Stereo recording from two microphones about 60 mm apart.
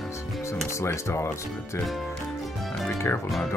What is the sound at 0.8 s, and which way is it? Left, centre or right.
Speech, left.